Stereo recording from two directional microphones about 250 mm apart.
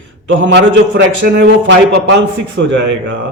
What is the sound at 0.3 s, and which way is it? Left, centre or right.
A man's voice, right.